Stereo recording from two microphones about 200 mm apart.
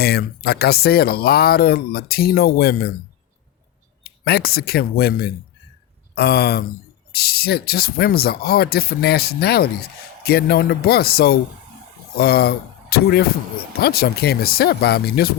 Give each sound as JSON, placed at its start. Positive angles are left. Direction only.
{"t": 0.0, "sound": "speech", "side_deg": 50}
{"t": 4.0, "sound": "speech", "side_deg": 50}